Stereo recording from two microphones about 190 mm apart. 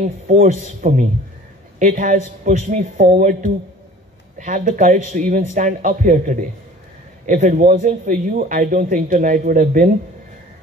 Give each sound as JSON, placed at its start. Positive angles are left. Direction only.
{"t": 0.0, "sound": "a man's voice", "side_deg": -40}